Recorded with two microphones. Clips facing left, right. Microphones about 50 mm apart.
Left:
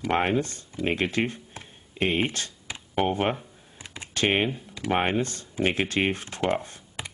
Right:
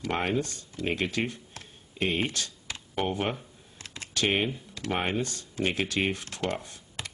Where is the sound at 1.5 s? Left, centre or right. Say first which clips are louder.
Left 3 dB; left.